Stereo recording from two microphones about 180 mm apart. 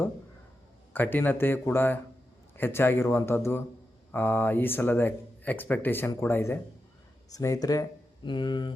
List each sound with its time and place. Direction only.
0.9 s speech: 10° left (ahead or behind); by 8.7 s 25° left (ahead or behind)